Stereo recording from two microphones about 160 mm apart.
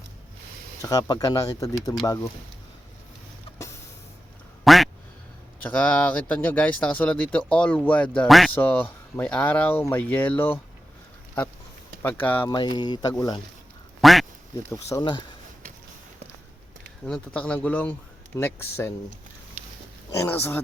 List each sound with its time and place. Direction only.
0.8 s speech: 20° left (ahead or behind)
4.6 s quack: centre (ahead or behind)
5.6 s speech: 10° left (ahead or behind)
8.5 s speech: 10° left (ahead or behind)
12.0 s speech: 10° left (ahead or behind)
12.5 s speech: 25° left (ahead or behind)
14.0 s quack: centre (ahead or behind)
14.7 s speech: 20° left (ahead or behind)
17.1 s speech: 10° left (ahead or behind)
20.1 s speech: 15° left (ahead or behind)